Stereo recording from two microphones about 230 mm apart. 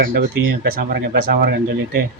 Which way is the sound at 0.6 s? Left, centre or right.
Right.